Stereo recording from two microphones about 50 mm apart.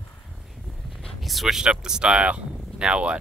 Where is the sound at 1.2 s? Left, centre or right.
Centre.